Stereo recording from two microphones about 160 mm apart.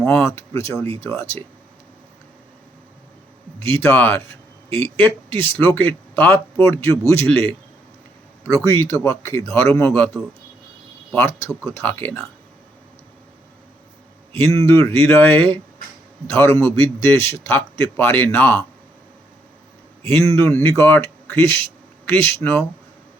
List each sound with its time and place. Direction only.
0.0 s a man's voice: 10° left (ahead or behind)
3.6 s a man's voice: 15° left (ahead or behind)
14.7 s a man's voice: 15° left (ahead or behind)
20.0 s speech: 15° left (ahead or behind)